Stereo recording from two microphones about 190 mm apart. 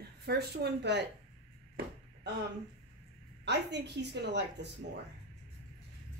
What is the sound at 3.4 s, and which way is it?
A woman's voice, 65° right (ahead or behind).